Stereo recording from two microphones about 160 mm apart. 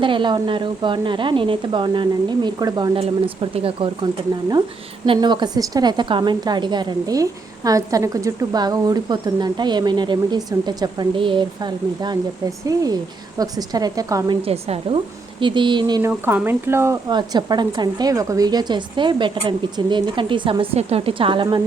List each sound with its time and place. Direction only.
0.0 s a woman's voice: 30° right (ahead or behind)
14.4 s a woman's voice: 40° right (ahead or behind)
16.0 s speech: 15° right (ahead or behind)
17.1 s a woman's voice: 25° right (ahead or behind)